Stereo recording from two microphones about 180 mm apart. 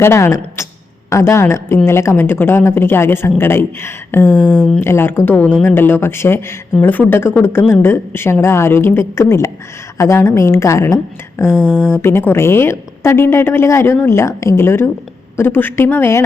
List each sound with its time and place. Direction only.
0.0 s a woman's voice: 15° left (ahead or behind)
11.5 s speech: 5° right (ahead or behind)
11.8 s a woman's voice: 15° left (ahead or behind)